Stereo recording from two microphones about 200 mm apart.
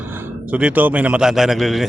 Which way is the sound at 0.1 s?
10° right (ahead or behind).